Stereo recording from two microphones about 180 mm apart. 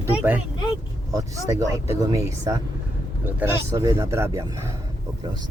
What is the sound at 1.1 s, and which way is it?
Speech, 20° right (ahead or behind).